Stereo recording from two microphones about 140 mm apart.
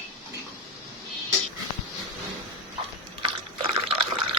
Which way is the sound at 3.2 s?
40° right (ahead or behind).